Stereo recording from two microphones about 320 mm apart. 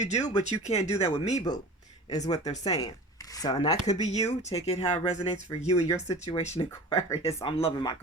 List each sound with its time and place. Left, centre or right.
0.0 s speech: left
6.4 s speech: left